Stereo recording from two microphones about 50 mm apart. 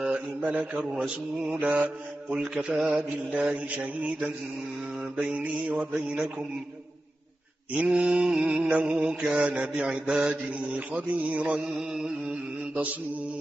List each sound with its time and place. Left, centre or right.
0.0 s mantra: right
3.3 s mantra: right
5.4 s mantra: right
7.7 s mantra: right
9.3 s mantra: right
11.9 s mantra: centre